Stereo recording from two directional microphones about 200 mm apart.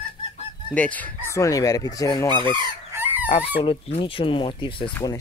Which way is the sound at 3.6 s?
25° left (ahead or behind).